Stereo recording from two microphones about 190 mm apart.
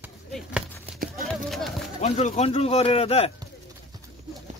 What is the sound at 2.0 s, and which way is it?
Speech, 35° left (ahead or behind).